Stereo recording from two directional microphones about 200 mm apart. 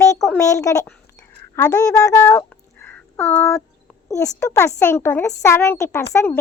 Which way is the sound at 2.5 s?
10° left (ahead or behind).